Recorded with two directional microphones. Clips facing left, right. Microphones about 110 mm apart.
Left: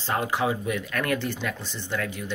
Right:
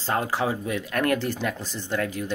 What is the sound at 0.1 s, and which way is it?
Speech, 30° right (ahead or behind).